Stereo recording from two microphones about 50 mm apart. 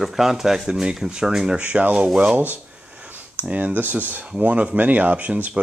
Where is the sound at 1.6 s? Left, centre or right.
Right.